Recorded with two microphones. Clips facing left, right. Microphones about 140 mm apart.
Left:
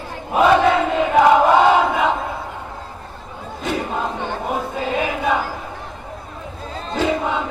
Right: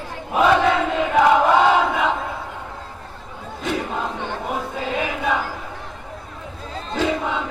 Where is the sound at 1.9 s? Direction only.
40° left (ahead or behind).